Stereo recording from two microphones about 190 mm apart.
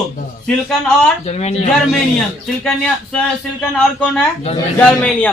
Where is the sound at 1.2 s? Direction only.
35° left (ahead or behind).